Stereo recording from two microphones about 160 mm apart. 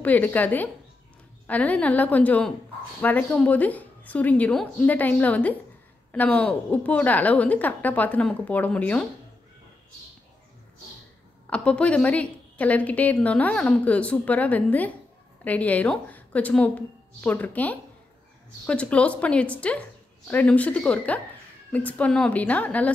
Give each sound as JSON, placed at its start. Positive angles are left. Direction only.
{"t": 0.0, "sound": "a woman's voice", "side_deg": 10}
{"t": 11.5, "sound": "a woman's voice", "side_deg": 5}